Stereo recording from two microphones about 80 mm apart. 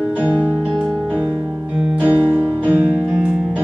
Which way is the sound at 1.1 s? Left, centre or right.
Centre.